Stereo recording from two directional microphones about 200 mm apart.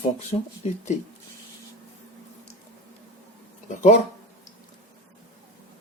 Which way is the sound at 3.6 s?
40° left (ahead or behind).